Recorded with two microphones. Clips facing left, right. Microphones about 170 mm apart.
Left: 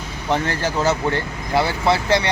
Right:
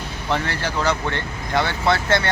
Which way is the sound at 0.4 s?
40° left (ahead or behind).